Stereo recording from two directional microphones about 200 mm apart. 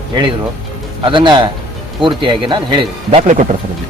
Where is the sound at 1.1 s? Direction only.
25° right (ahead or behind).